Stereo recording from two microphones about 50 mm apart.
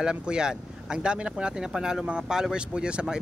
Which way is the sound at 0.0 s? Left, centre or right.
Centre.